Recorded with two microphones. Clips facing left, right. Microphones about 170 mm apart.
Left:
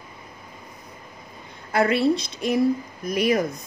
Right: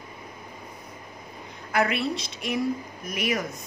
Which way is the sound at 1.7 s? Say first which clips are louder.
Left 6 dB; 35° left (ahead or behind).